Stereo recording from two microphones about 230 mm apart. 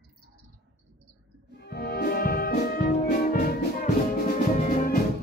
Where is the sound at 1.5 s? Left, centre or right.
Left.